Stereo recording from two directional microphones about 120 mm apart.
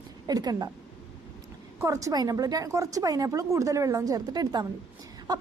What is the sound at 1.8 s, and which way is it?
A woman's voice, 25° right (ahead or behind).